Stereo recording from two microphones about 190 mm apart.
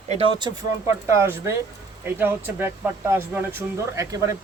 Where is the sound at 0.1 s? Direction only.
25° right (ahead or behind).